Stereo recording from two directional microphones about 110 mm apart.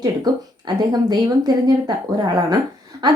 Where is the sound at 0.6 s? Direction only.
40° right (ahead or behind).